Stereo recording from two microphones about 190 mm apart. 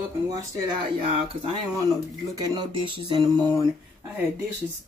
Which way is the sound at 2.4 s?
25° right (ahead or behind).